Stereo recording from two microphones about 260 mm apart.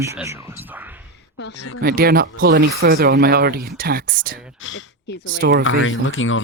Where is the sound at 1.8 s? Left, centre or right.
Right.